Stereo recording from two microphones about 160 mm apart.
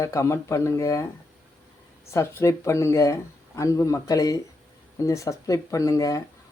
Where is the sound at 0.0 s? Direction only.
20° left (ahead or behind).